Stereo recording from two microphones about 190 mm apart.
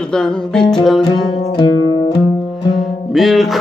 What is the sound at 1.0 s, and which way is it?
Music, 25° left (ahead or behind).